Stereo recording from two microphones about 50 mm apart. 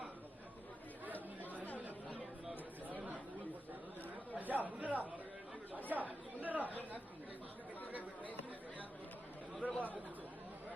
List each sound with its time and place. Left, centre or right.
4.4 s chatter: right
9.6 s chatter: left